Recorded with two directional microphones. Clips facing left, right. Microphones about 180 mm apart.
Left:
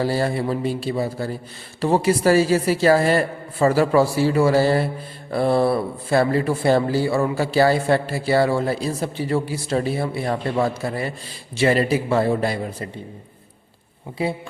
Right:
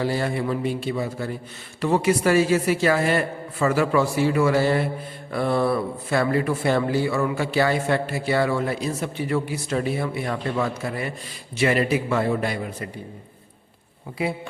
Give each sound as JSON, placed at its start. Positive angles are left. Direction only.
{"t": 0.0, "sound": "speech", "side_deg": 35}